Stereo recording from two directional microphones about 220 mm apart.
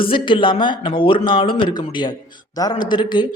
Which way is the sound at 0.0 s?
25° left (ahead or behind).